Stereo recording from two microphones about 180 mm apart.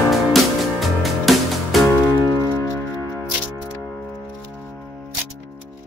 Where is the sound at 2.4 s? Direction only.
15° left (ahead or behind).